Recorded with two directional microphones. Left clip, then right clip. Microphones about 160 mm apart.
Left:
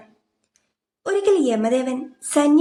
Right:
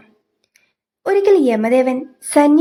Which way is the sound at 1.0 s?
35° right (ahead or behind).